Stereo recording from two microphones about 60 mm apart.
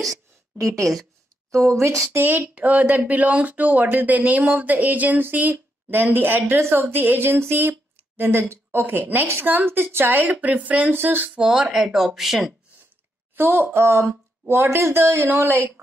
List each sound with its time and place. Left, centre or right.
0.6 s a woman's voice: right
2.2 s a woman's voice: right
11.2 s speech: centre
13.4 s a woman's voice: right